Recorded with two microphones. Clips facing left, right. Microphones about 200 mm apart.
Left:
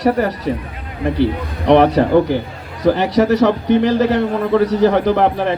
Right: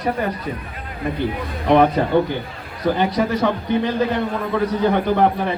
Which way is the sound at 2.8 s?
90° left.